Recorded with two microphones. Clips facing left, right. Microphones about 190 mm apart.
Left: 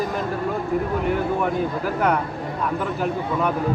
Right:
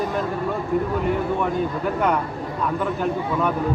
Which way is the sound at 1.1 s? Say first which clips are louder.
Even; centre (ahead or behind).